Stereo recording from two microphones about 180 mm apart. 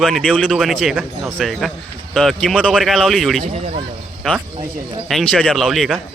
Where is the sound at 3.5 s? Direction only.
35° right (ahead or behind).